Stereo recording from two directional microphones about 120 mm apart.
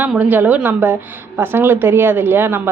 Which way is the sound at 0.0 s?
10° right (ahead or behind).